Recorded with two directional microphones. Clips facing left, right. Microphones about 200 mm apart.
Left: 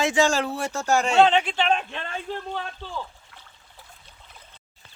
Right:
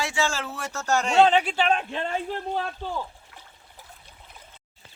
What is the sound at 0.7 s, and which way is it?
Speech, 10° left (ahead or behind).